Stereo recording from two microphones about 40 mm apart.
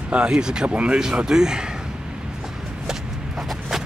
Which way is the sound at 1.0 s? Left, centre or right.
Centre.